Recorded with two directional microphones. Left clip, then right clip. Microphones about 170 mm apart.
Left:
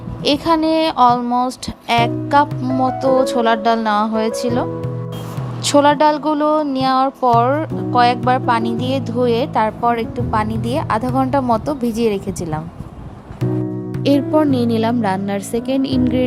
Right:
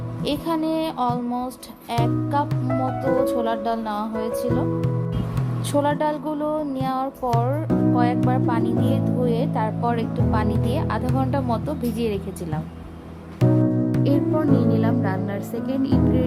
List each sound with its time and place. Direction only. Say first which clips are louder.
0.3 s speech: left 9 dB; 25° left (ahead or behind)
5.6 s speech: left 10 dB; 25° left (ahead or behind)
14.0 s speech: left 9 dB; 45° left (ahead or behind)